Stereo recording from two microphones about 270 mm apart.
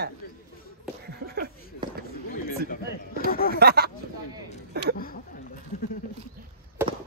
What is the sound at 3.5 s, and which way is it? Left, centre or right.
Speech, right.